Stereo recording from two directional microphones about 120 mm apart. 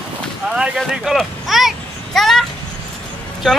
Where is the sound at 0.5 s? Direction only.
5° right (ahead or behind).